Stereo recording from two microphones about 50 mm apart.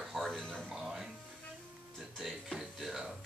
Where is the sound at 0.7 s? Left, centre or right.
Centre.